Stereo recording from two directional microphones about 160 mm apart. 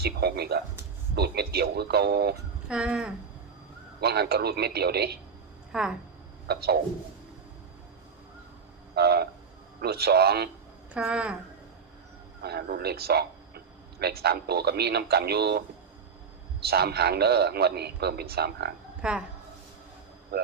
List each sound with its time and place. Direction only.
0.0 s a man's voice: 90° right
2.6 s a sound: 5° right (ahead or behind)
4.0 s a man's voice: 85° right
5.7 s speech: 5° right (ahead or behind)
6.5 s a man's voice: 85° right
9.0 s train: 85° right
9.8 s a man's voice: 80° right
10.9 s a sound: 5° right (ahead or behind)
12.4 s a man's voice: 85° right
16.6 s a man's voice: 80° right
19.0 s speech: 5° right (ahead or behind)
20.3 s speech: 80° right